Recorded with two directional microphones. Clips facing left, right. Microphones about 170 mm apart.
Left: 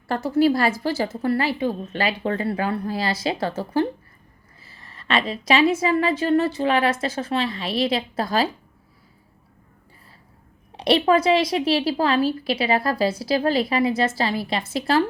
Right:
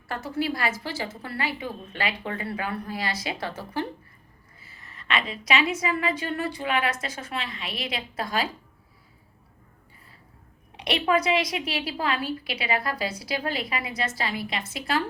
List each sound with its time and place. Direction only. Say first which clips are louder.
0.1 s a woman's voice: left 10 dB; 35° left (ahead or behind)
10.8 s a woman's voice: left 6 dB; 30° left (ahead or behind)